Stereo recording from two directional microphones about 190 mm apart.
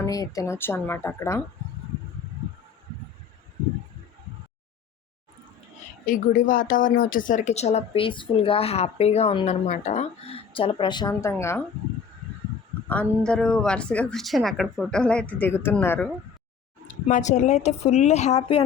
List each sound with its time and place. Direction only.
0.0 s a woman's voice: 20° left (ahead or behind)
6.1 s speech: 45° left (ahead or behind); by 11.6 s 15° left (ahead or behind)
12.9 s a woman's voice: 5° left (ahead or behind)
17.1 s speech: 40° left (ahead or behind)